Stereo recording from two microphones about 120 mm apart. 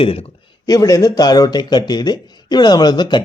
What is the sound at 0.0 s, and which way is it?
Speech, 50° left (ahead or behind).